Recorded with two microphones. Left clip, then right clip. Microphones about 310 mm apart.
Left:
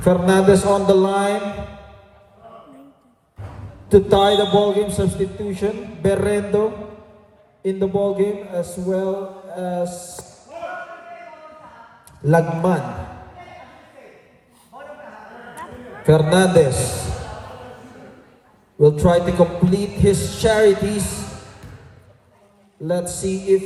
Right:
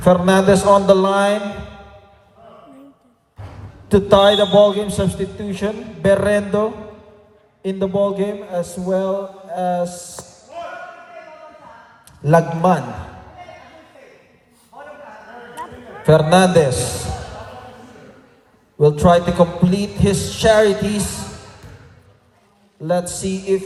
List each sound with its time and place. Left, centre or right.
0.0 s mantra: centre
3.8 s mantra: centre
10.2 s a sound: centre
12.2 s mantra: centre
16.0 s mantra: centre
18.8 s mantra: centre
22.8 s mantra: centre